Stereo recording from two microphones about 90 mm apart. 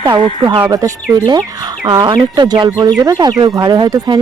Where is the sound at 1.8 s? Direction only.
60° right (ahead or behind).